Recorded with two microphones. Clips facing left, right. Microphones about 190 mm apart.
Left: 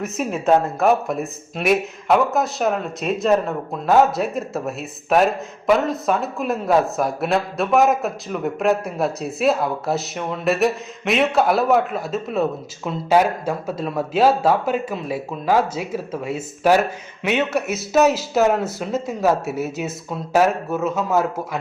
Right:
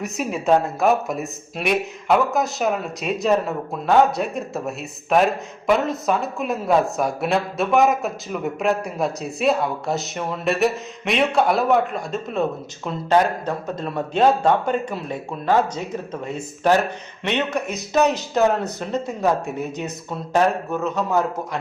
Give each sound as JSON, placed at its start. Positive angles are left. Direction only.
{"t": 0.0, "sound": "speech", "side_deg": 0}